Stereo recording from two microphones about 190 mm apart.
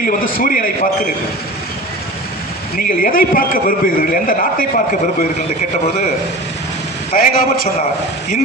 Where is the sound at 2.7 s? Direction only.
45° left (ahead or behind).